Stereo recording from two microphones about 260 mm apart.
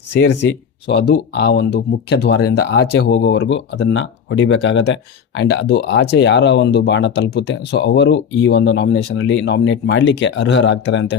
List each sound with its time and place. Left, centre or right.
0.9 s speech: left